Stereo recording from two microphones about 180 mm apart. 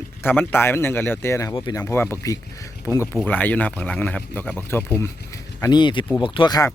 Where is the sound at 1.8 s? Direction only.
10° left (ahead or behind).